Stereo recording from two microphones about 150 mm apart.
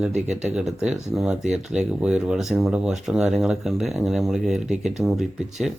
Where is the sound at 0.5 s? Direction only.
5° right (ahead or behind).